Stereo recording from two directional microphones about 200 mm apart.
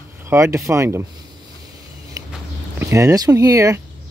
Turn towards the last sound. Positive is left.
turn(degrees=-15)  # may be behind; listen again after turning